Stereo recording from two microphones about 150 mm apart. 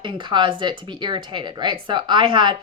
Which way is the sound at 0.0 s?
35° right (ahead or behind).